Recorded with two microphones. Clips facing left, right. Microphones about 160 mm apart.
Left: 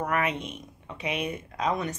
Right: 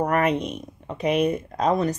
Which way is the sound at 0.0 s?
40° right (ahead or behind).